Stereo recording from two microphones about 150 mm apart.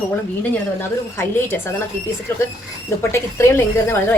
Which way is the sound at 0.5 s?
15° left (ahead or behind).